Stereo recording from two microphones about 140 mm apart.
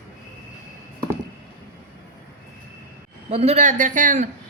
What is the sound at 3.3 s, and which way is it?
Speech, 50° right (ahead or behind).